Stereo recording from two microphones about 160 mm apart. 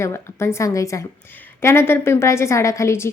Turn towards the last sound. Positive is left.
turn(degrees=15)  # may be behind; listen again after turning